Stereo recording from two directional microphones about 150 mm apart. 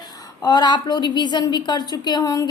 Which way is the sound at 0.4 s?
25° left (ahead or behind).